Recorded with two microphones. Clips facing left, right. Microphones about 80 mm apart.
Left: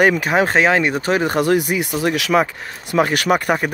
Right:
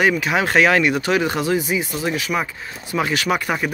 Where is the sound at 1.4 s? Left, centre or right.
Left.